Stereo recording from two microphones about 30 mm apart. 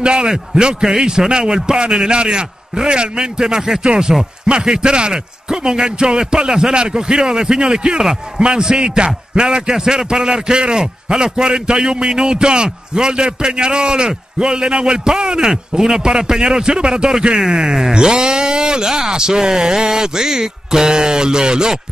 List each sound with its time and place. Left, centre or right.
0.0 s a man's voice: right